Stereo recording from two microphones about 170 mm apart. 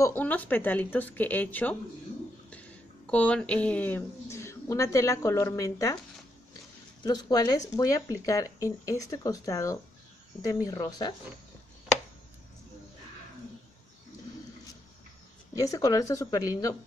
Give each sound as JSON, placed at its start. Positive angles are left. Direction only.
{"t": 0.0, "sound": "speech", "side_deg": 10}
{"t": 3.1, "sound": "speech", "side_deg": 5}
{"t": 7.0, "sound": "speech", "side_deg": 25}
{"t": 15.5, "sound": "speech", "side_deg": 20}